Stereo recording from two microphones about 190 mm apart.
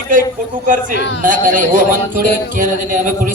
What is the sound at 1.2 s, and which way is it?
A man's voice, 45° right (ahead or behind).